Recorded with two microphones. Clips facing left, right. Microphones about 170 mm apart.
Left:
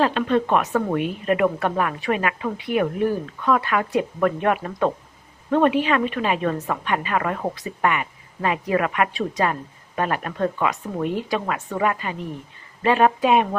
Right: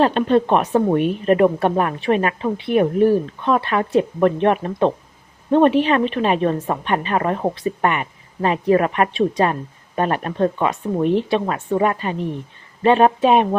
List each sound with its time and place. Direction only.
0.0 s a woman's voice: 35° right (ahead or behind)